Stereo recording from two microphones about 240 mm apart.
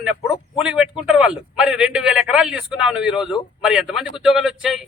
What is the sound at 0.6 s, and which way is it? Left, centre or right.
A man's voice, centre.